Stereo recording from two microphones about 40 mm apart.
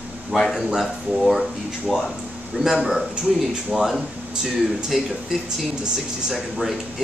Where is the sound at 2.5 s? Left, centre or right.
Right; by 5.1 s centre.